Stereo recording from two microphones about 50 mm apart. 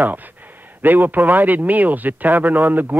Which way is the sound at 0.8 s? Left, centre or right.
Right.